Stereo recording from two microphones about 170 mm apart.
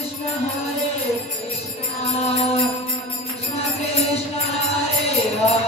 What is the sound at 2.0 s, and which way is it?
Music, 35° left (ahead or behind).